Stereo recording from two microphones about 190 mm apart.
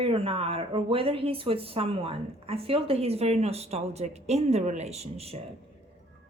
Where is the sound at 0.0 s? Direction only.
30° right (ahead or behind).